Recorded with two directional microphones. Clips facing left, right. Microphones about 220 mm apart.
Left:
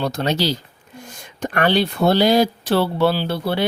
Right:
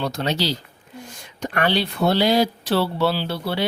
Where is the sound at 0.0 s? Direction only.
45° left (ahead or behind).